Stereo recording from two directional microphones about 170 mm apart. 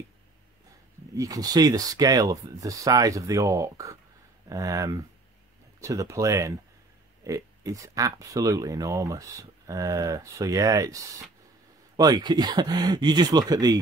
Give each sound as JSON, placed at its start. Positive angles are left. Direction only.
{"t": 1.1, "sound": "speech", "side_deg": -20}